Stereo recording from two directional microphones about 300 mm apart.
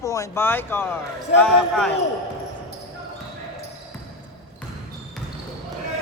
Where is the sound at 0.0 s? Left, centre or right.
Centre.